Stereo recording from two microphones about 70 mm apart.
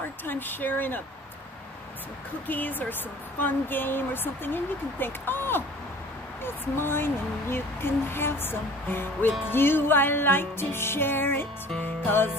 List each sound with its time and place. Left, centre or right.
0.2 s speech: left
2.4 s speech: left